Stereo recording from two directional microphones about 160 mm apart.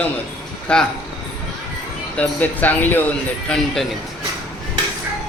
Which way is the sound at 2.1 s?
10° left (ahead or behind).